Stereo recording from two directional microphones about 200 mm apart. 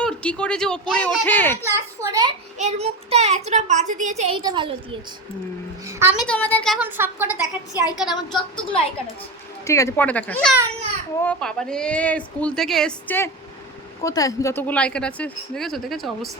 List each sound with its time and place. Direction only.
0.0 s speech: 5° left (ahead or behind)
2.0 s a woman's voice: 15° right (ahead or behind)
2.6 s a child's voice: 35° right (ahead or behind)
5.8 s a woman's voice: 15° right (ahead or behind)
6.2 s speech: 5° left (ahead or behind)
6.7 s a woman's voice: 10° right (ahead or behind)
7.4 s a woman's voice: 20° left (ahead or behind); by 16.3 s centre (ahead or behind)